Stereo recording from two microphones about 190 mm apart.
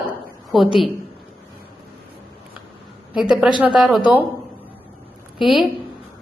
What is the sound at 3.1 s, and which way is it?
Speech, 5° right (ahead or behind).